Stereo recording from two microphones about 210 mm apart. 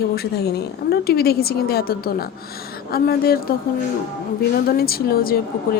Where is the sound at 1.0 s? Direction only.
50° left (ahead or behind).